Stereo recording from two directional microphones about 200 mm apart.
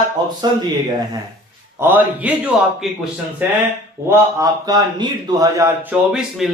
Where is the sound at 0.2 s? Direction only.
20° right (ahead or behind).